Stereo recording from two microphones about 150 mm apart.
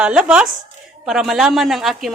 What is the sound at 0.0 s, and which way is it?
A man's voice, 5° right (ahead or behind).